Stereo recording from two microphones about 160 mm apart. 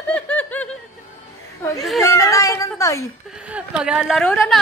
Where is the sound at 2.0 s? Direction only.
20° left (ahead or behind).